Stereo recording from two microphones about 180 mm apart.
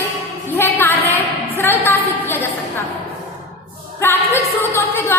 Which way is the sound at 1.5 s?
10° left (ahead or behind).